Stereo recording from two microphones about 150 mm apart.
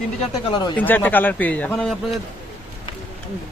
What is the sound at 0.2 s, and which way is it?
Speech, 35° left (ahead or behind).